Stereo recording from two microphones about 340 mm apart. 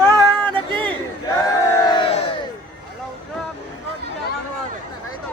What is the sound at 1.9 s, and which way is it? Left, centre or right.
Crowd, centre.